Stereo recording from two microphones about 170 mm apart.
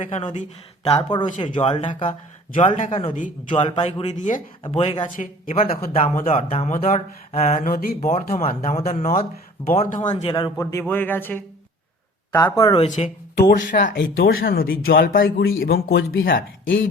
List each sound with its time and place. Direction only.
0.0 s speech: 45° left (ahead or behind)
0.9 s speech: 25° left (ahead or behind)
1.5 s speech: 40° left (ahead or behind)
2.6 s speech: 45° left (ahead or behind)
5.1 s speech: 50° left (ahead or behind)
8.1 s speech: 35° left (ahead or behind)
10.2 s a man's voice: 25° left (ahead or behind)
12.7 s speech: 35° left (ahead or behind)
13.5 s speech: 55° left (ahead or behind); by 16.8 s 75° left (ahead or behind)